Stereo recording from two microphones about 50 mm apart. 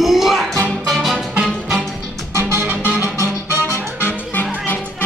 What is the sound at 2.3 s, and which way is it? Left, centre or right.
Music, right.